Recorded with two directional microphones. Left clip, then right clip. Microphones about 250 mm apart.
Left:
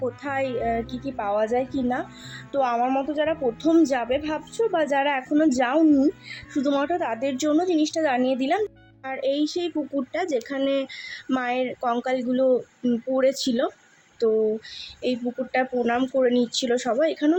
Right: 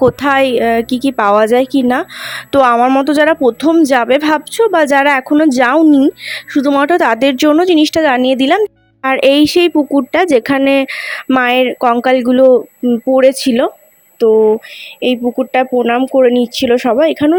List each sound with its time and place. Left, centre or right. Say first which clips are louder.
0.0 s a woman's voice: right 16 dB; right
15.0 s a woman's voice: right 13 dB; right